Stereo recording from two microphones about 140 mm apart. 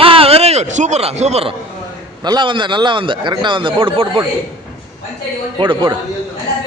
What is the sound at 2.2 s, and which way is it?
Speech, 35° right (ahead or behind).